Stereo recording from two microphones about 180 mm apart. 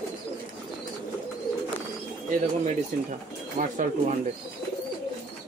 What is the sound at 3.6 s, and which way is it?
Speech, 45° right (ahead or behind).